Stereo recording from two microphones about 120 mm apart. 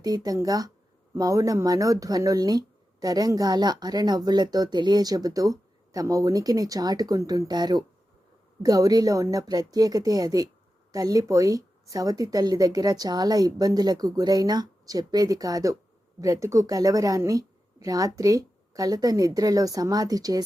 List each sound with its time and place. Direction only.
0.0 s a woman's voice: 35° right (ahead or behind)